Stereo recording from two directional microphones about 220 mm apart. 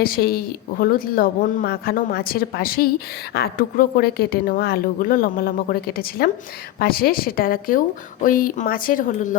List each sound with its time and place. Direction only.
0.0 s a woman's voice: 45° left (ahead or behind)